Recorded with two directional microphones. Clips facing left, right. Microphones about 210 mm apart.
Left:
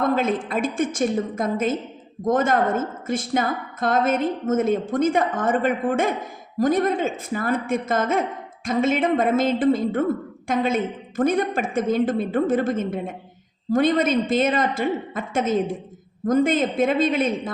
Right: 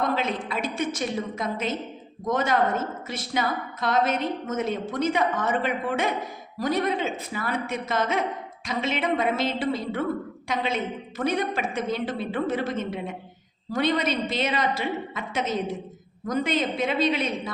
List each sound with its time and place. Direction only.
0.0 s a woman's voice: 50° left (ahead or behind)